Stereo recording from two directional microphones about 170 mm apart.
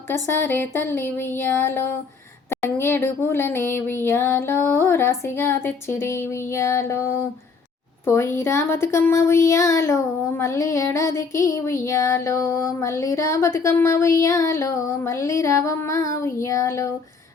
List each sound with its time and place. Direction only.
0.1 s speech: 10° left (ahead or behind)
8.0 s speech: 15° left (ahead or behind)